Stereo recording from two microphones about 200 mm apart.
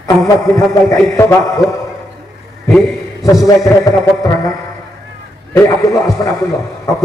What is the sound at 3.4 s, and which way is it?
Speech, 15° left (ahead or behind).